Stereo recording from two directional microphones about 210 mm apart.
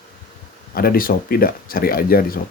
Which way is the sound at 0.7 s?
45° left (ahead or behind).